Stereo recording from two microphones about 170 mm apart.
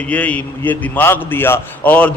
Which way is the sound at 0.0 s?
10° left (ahead or behind).